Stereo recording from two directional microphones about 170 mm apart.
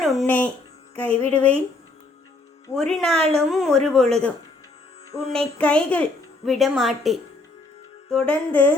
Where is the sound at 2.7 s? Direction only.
Centre (ahead or behind).